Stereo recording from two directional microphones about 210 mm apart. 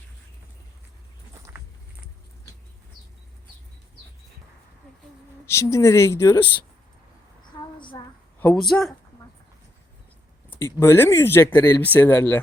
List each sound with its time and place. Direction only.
1.5 s a sound: 10° right (ahead or behind)
5.5 s speech: 15° left (ahead or behind)
7.8 s child singing: 20° left (ahead or behind)
8.7 s speech: centre (ahead or behind)
10.5 s speech: 10° left (ahead or behind)